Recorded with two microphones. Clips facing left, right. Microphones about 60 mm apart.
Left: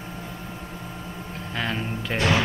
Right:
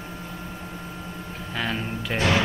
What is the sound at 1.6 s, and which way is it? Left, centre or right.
Speech, centre.